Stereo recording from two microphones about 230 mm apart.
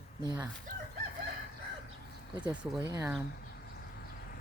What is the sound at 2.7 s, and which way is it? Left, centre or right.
Speech, centre.